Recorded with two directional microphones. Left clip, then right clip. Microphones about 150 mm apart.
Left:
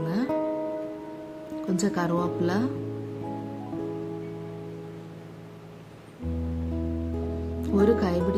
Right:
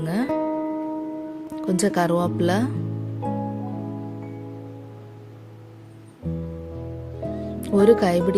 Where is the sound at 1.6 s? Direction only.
50° right (ahead or behind).